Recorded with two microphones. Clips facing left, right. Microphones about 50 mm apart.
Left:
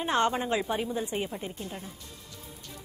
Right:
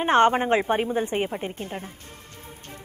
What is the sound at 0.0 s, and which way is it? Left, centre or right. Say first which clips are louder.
A woman's voice: right 8 dB; right.